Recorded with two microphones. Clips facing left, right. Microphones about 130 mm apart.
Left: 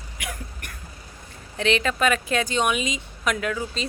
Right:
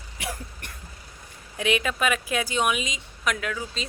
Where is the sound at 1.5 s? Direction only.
10° right (ahead or behind).